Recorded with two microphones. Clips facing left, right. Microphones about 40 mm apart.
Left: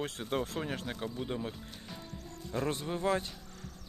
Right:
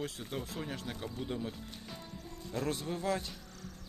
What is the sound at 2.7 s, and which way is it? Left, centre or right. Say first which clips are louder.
Speech: left 3 dB; left.